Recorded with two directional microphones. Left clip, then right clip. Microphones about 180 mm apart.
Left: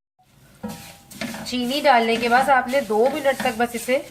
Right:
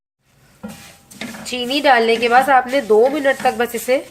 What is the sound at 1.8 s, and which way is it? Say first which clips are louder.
A woman's voice: right 4 dB; 65° right (ahead or behind).